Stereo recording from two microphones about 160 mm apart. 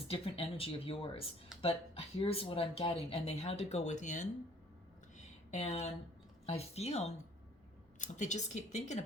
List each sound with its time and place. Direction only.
0.1 s speech: 35° left (ahead or behind)
5.1 s a sound: 45° left (ahead or behind)
6.4 s speech: 40° left (ahead or behind)